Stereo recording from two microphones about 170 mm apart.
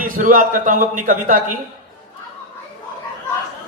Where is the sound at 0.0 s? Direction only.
50° right (ahead or behind).